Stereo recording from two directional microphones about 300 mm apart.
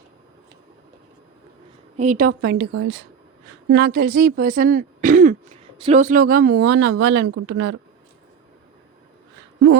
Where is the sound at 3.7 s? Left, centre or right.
Right.